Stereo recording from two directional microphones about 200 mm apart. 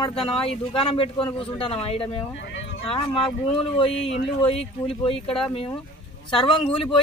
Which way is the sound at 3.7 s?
30° left (ahead or behind).